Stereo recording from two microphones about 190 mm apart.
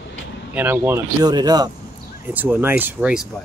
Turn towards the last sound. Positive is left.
turn(degrees=-5)  # may be behind; listen again after turning